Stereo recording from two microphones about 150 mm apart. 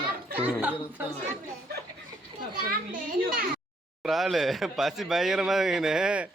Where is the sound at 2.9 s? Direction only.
70° right (ahead or behind).